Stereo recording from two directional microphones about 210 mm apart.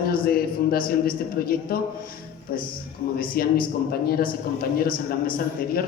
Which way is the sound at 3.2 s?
45° left (ahead or behind).